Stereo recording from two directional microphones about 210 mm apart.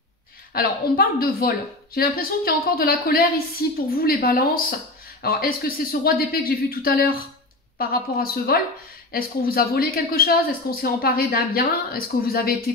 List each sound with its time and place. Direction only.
0.5 s speech: 45° left (ahead or behind)